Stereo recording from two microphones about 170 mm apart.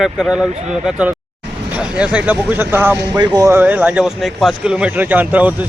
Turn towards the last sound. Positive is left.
turn(degrees=-10)  # may be behind; listen again after turning